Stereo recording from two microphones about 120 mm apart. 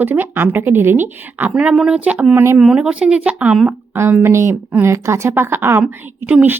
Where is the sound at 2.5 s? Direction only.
5° right (ahead or behind).